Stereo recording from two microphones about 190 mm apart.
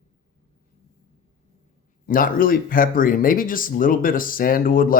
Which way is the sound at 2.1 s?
45° left (ahead or behind).